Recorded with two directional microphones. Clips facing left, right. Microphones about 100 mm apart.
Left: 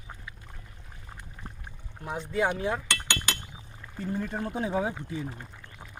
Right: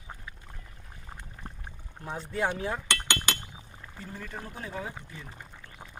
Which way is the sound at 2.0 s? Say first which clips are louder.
Left 3 dB; 5° left (ahead or behind).